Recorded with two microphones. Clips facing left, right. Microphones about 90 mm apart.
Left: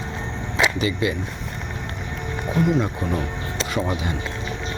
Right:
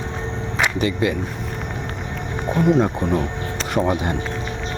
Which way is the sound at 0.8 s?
50° right (ahead or behind).